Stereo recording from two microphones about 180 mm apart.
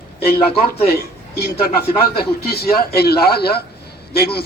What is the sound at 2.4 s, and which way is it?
A man's voice, 60° left (ahead or behind).